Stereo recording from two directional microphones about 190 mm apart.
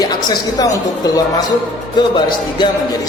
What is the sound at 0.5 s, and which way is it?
Speech, 20° left (ahead or behind).